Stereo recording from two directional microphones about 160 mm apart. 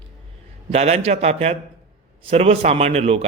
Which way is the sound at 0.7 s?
45° right (ahead or behind).